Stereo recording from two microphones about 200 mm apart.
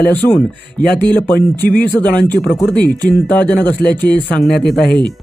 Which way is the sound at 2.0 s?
10° left (ahead or behind).